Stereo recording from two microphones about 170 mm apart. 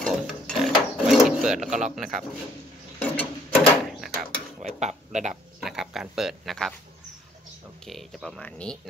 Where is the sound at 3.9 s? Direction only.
Centre (ahead or behind).